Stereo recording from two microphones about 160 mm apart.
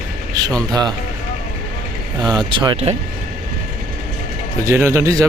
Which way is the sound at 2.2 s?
25° right (ahead or behind).